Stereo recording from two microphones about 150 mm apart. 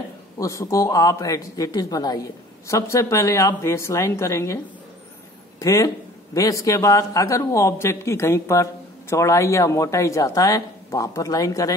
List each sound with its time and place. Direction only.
0.4 s a man's voice: 20° left (ahead or behind)
5.6 s a man's voice: 20° left (ahead or behind)